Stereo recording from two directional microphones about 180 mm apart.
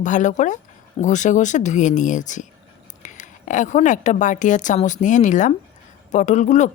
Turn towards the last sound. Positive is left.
turn(degrees=40)  # may be behind; listen again after turning